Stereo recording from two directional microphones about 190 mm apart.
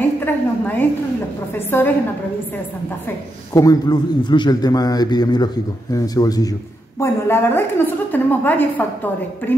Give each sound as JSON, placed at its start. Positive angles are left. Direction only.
{"t": 0.0, "sound": "a sound", "side_deg": 10}
{"t": 1.5, "sound": "a woman's voice", "side_deg": 10}
{"t": 3.5, "sound": "a man's voice", "side_deg": 20}